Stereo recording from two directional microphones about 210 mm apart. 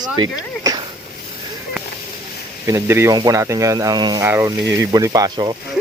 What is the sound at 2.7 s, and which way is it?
Speech, 10° right (ahead or behind).